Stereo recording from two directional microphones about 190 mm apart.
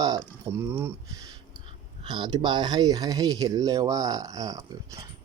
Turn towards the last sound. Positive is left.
turn(degrees=-20)  # may be behind; listen again after turning